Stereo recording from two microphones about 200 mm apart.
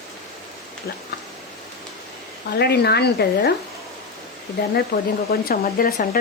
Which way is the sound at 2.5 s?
55° left (ahead or behind).